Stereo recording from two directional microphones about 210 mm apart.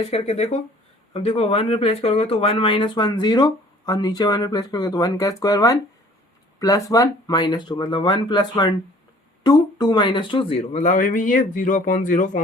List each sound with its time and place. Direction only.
0.0 s speech: 30° left (ahead or behind)